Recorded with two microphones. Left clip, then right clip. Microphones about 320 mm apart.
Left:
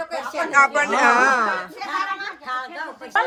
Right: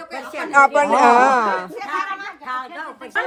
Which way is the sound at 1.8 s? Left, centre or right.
Right.